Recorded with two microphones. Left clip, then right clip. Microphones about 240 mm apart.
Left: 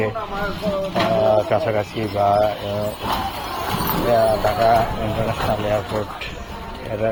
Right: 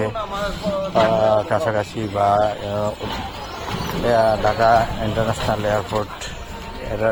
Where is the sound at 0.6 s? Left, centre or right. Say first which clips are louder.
Right 4 dB; centre.